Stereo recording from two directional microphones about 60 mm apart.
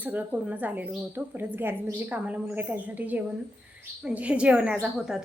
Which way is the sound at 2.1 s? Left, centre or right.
Right.